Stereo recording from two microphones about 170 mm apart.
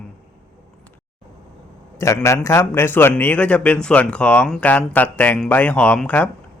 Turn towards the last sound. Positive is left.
turn(degrees=10)  # may be behind; listen again after turning